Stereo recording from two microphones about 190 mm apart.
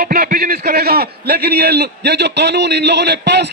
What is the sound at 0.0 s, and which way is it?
A man's voice, 50° right (ahead or behind).